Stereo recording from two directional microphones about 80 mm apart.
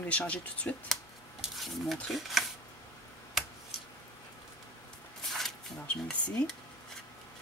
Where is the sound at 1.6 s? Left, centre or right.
Centre.